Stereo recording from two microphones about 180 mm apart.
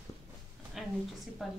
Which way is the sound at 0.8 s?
Centre (ahead or behind).